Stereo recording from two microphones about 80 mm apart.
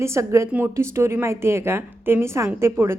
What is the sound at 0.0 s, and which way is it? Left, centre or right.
A woman's voice, right.